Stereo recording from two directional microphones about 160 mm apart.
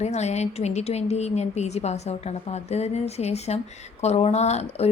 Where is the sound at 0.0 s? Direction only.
45° left (ahead or behind).